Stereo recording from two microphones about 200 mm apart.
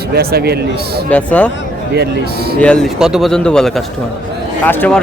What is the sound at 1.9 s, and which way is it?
Speech, 55° right (ahead or behind).